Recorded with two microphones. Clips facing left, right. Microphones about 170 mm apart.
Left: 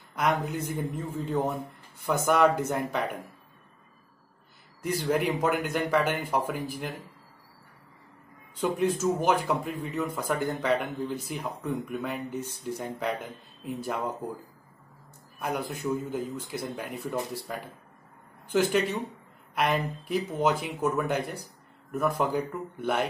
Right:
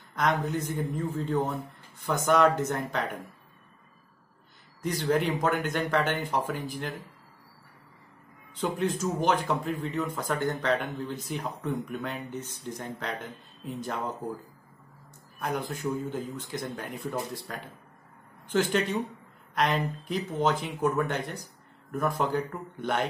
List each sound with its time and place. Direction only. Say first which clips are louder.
0.1 s speech: even; 10° left (ahead or behind)
4.8 s speech: even; 5° left (ahead or behind)
8.5 s speech: left 2 dB; 5° left (ahead or behind)
15.3 s speech: even; 10° left (ahead or behind)